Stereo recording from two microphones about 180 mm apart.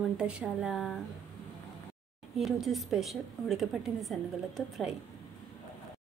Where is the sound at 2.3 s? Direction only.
Centre (ahead or behind).